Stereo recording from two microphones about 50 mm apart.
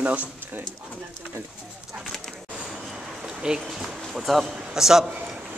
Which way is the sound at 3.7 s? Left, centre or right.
Centre.